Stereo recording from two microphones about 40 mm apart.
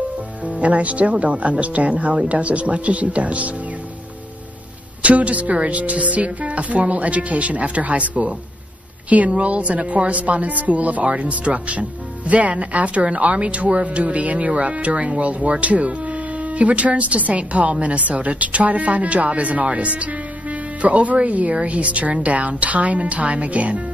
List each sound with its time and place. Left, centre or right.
0.5 s speech: right
5.0 s speech: right